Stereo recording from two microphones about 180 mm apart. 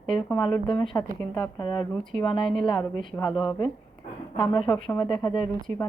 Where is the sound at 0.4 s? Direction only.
25° left (ahead or behind).